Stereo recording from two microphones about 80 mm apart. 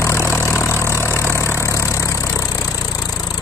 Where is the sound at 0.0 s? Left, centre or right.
Left.